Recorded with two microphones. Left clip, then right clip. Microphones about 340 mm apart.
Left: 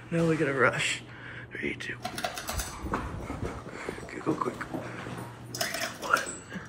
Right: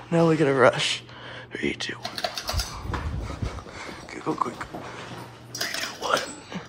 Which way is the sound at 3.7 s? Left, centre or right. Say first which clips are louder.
Right 1 dB; centre.